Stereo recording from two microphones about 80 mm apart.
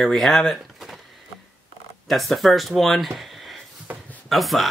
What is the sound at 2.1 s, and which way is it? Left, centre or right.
Speech, centre.